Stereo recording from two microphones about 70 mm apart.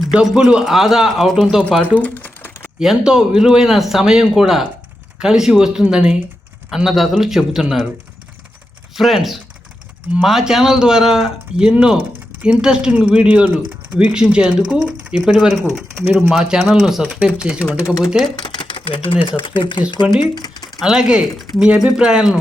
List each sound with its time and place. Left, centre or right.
0.1 s speech: centre
1.8 s typewriter: left
2.7 s speech: centre
9.0 s speech: centre
17.2 s speech: centre
18.3 s speech: left
20.3 s a sound: left
20.8 s speech: centre
21.3 s speech: centre
21.8 s speech: centre